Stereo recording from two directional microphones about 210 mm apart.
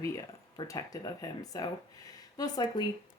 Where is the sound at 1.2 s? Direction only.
20° left (ahead or behind).